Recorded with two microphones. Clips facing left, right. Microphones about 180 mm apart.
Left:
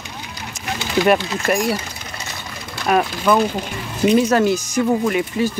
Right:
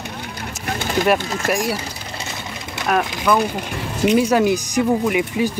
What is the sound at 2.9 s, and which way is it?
Speech, 5° left (ahead or behind).